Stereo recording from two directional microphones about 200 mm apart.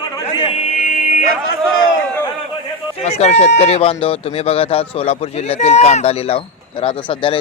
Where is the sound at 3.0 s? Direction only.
35° left (ahead or behind).